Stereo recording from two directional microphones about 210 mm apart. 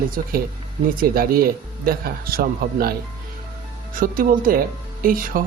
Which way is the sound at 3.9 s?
40° right (ahead or behind).